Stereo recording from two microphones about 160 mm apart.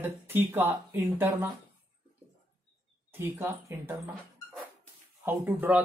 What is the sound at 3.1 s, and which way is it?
Speech, 15° right (ahead or behind).